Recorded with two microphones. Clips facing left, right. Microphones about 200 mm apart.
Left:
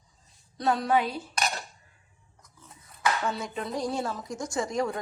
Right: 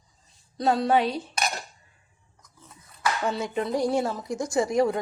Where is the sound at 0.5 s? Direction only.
30° right (ahead or behind).